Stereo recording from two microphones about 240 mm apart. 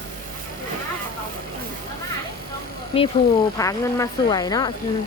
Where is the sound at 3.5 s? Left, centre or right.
Centre.